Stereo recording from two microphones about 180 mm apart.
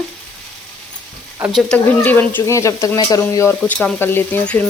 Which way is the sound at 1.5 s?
5° left (ahead or behind).